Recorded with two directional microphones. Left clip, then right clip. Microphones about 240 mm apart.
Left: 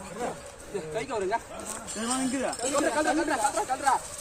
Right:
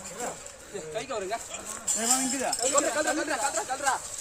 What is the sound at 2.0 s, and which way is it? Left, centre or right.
Speech, right.